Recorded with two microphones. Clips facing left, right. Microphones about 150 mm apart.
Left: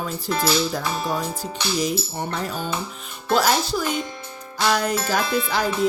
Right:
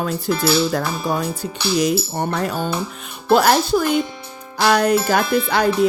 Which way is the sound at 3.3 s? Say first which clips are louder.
Right 5 dB; 55° right (ahead or behind).